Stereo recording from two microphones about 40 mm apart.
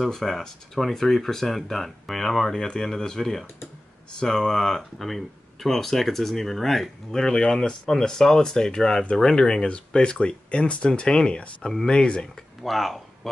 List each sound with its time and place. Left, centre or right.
0.0 s speech: centre
12.6 s speech: centre